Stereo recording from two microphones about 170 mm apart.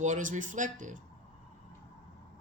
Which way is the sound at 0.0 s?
50° right (ahead or behind).